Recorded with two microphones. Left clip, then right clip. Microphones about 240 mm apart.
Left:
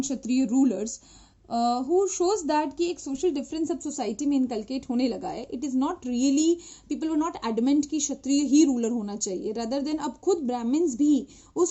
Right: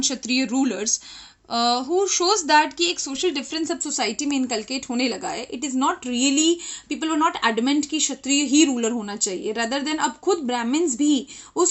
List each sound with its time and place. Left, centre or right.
0.0 s a woman's voice: centre